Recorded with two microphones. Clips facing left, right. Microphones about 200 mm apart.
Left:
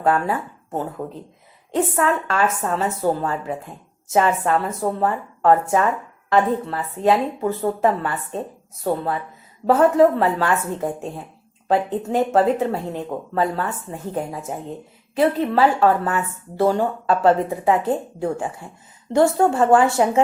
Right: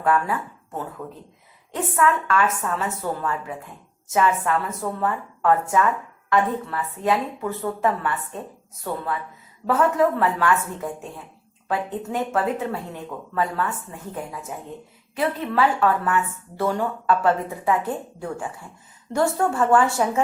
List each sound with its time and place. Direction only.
0.0 s speech: 30° left (ahead or behind)